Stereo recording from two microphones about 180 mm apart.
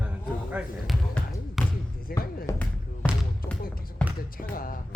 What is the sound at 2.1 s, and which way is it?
Speech, 55° left (ahead or behind).